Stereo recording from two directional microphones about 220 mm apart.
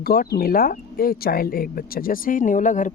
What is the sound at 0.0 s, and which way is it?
Speech, 40° left (ahead or behind).